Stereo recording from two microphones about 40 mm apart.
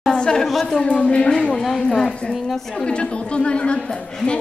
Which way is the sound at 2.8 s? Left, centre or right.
Left.